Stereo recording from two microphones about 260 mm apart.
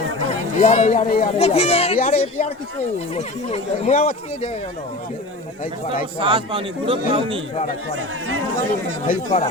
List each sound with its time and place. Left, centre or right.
0.6 s speech: left
6.1 s a man's voice: centre
9.0 s speech: left